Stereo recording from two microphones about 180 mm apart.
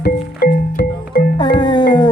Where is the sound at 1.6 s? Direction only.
25° left (ahead or behind).